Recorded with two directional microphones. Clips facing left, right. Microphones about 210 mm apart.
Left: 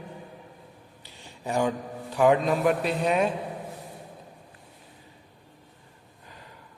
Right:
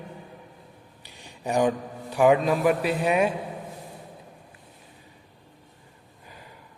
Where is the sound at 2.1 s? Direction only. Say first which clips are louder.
Right 2 dB; 10° right (ahead or behind).